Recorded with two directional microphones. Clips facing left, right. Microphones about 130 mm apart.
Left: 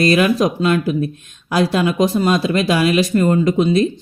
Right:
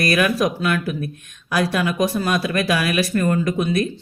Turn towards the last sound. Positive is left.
turn(degrees=20)  # may be behind; listen again after turning